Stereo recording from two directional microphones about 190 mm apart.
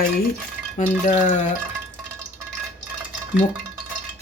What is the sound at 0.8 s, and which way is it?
Speech, 40° left (ahead or behind).